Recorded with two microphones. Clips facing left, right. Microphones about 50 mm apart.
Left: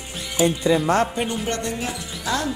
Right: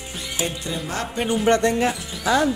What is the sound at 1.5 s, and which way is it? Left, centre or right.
Speech, right.